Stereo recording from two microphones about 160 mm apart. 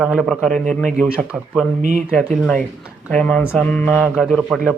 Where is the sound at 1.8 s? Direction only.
55° right (ahead or behind).